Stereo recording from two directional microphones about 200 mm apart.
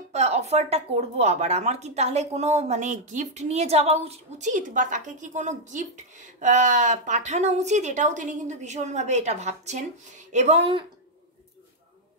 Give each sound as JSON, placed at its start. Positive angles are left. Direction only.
{"t": 0.1, "sound": "speech", "side_deg": -35}